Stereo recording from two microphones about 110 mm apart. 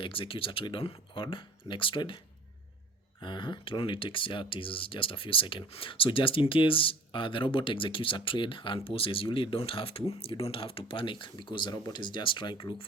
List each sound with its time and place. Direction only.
0.0 s speech: 55° left (ahead or behind)